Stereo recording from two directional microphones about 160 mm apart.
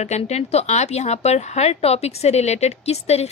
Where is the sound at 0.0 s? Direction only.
45° left (ahead or behind).